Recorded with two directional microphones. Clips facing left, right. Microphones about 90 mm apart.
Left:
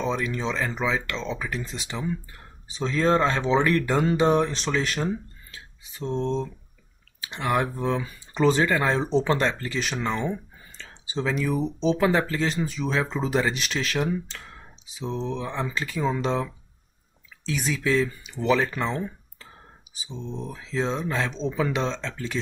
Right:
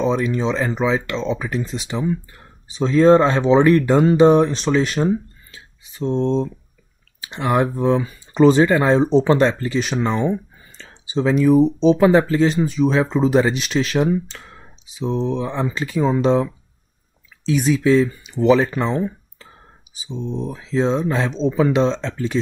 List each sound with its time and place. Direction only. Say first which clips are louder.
0.0 s speech: right 7 dB; 20° right (ahead or behind)
17.5 s speech: right 9 dB; 20° right (ahead or behind)
20.4 s speech: right 8 dB; 25° right (ahead or behind)